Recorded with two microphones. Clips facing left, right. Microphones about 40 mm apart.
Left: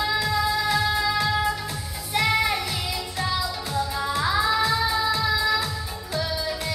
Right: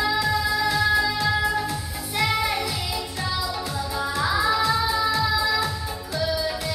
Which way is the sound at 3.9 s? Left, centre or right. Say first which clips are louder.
Right 1 dB; centre.